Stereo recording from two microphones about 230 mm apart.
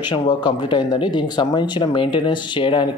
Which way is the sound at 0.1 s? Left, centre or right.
Centre.